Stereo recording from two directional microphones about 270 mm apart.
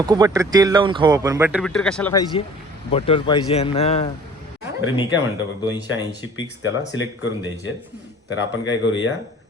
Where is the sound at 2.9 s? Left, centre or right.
Left.